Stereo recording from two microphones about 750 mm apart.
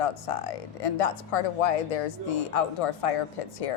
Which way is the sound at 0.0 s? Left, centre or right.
Left.